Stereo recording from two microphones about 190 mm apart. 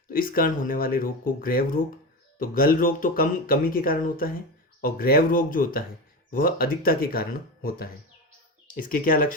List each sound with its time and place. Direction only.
0.1 s speech: 50° left (ahead or behind)